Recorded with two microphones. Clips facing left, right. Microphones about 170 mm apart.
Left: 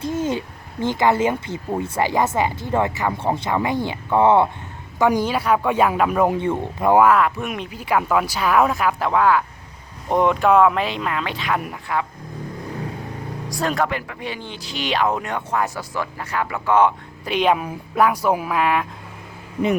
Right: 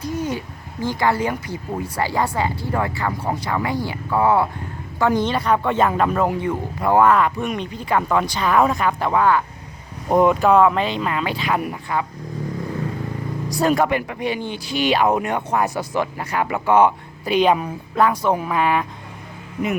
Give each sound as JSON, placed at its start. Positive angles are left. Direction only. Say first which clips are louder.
{"t": 0.0, "sound": "speech", "louder": "left 2 dB", "side_deg": 25}
{"t": 4.9, "sound": "speech", "louder": "left 1 dB", "side_deg": 15}
{"t": 6.9, "sound": "speech", "louder": "even", "side_deg": 5}
{"t": 13.5, "sound": "speech", "louder": "right 4 dB", "side_deg": -5}